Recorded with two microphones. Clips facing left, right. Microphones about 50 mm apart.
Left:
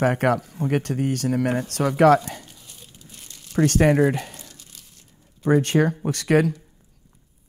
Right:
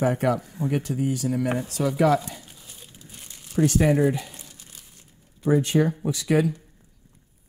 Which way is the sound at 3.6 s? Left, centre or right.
Left.